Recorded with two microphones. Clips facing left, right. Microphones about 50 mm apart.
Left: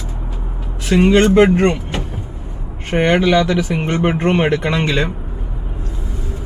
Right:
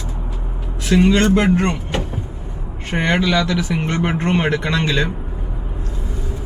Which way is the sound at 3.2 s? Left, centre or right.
Left.